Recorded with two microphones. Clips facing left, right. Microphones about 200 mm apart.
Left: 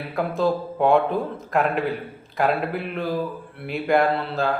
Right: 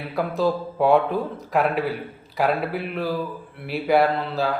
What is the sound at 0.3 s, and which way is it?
A man's voice, 5° right (ahead or behind).